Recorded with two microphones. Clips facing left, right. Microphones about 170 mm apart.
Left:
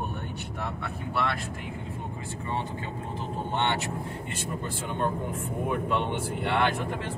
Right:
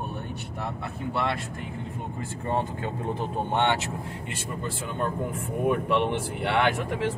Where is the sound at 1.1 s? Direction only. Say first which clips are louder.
Right 2 dB; 25° right (ahead or behind).